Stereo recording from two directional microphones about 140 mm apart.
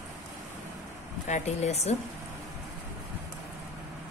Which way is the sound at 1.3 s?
50° left (ahead or behind).